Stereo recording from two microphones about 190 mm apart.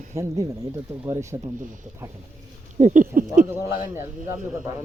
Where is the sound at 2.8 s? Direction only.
40° right (ahead or behind).